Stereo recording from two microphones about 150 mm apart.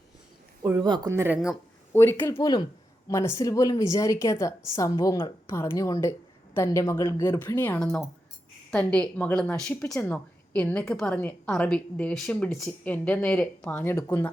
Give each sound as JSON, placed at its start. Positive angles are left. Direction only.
{"t": 0.8, "sound": "speech", "side_deg": -30}
{"t": 1.1, "sound": "speech", "side_deg": -15}
{"t": 1.9, "sound": "a woman's voice", "side_deg": 15}
{"t": 2.4, "sound": "a woman's voice", "side_deg": 30}